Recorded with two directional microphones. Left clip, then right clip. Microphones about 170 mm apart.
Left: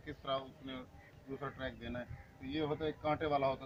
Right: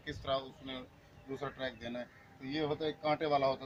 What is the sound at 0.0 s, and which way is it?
A man's voice, 20° right (ahead or behind).